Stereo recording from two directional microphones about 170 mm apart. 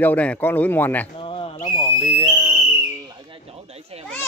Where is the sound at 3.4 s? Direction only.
35° right (ahead or behind).